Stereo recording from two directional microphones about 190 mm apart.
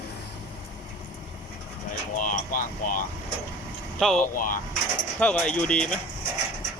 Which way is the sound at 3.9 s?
Centre (ahead or behind).